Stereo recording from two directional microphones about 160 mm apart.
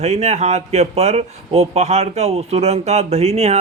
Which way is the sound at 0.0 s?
45° right (ahead or behind).